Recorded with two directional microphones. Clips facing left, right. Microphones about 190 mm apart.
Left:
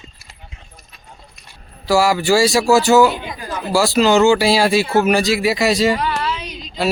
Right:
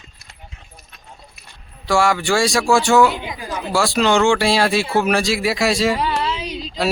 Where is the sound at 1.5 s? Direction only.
5° left (ahead or behind).